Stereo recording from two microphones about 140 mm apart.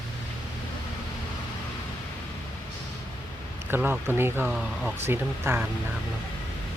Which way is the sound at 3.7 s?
15° right (ahead or behind).